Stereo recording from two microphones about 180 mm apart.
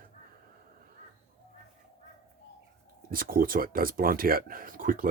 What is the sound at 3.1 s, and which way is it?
Speech, 55° right (ahead or behind).